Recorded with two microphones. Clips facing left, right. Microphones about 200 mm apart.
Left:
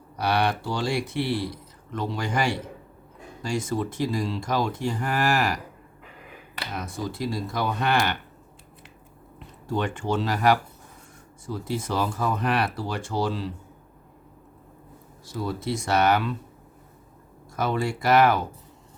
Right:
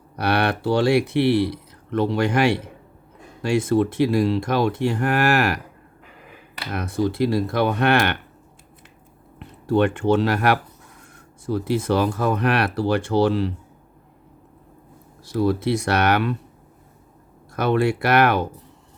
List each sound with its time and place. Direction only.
0.2 s speech: 60° right (ahead or behind)
6.7 s speech: 65° right (ahead or behind)
9.4 s speech: 65° right (ahead or behind)
15.2 s speech: 65° right (ahead or behind)
17.6 s speech: 65° right (ahead or behind)